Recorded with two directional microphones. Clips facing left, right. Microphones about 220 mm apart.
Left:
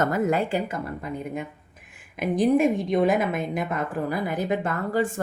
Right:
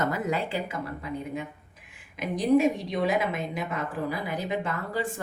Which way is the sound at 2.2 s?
50° left (ahead or behind).